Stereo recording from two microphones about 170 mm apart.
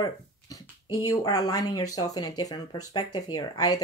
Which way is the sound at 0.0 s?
20° left (ahead or behind).